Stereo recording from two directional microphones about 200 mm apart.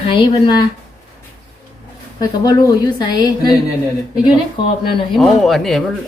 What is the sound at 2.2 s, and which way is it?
A woman's voice, 20° left (ahead or behind).